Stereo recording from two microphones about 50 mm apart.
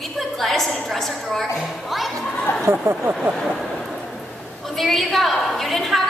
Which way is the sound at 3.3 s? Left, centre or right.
Centre.